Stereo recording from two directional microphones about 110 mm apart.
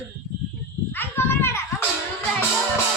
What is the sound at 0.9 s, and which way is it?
Children playing, 20° left (ahead or behind).